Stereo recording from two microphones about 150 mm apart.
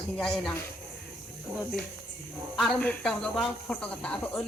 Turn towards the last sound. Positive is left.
turn(degrees=5)  # may be behind; listen again after turning